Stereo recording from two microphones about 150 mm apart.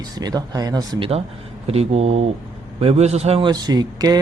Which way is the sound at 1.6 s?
40° right (ahead or behind).